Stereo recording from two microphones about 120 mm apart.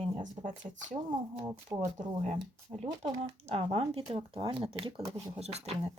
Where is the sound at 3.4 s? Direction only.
55° right (ahead or behind).